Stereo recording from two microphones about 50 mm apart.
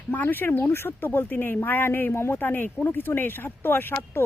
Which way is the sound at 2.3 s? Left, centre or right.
Left.